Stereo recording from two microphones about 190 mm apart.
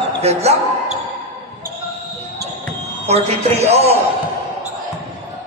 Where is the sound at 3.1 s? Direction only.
35° right (ahead or behind).